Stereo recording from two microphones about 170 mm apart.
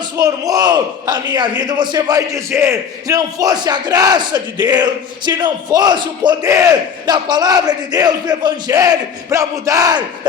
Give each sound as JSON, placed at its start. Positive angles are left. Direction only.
{"t": 0.2, "sound": "a man's voice", "side_deg": -20}